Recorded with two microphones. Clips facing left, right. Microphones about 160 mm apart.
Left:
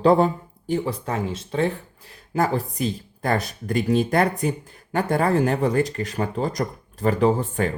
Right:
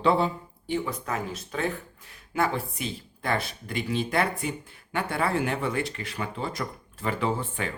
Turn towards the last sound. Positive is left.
turn(degrees=40)  # may be behind; listen again after turning